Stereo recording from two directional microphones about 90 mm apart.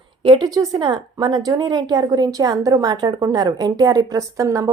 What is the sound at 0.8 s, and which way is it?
A woman's voice, 55° right (ahead or behind).